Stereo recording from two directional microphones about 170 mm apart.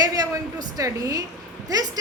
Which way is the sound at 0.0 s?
20° right (ahead or behind).